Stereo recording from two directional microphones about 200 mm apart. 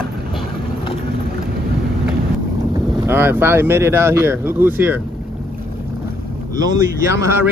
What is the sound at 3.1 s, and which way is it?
Speech, 10° right (ahead or behind).